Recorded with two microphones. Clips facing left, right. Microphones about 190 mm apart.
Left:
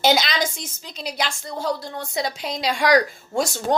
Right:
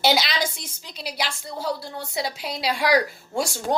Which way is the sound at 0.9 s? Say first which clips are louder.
Left 3 dB; 5° right (ahead or behind).